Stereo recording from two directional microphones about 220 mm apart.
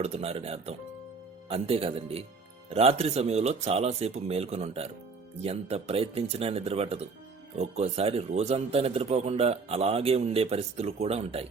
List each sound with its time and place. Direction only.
0.0 s a man's voice: 30° right (ahead or behind)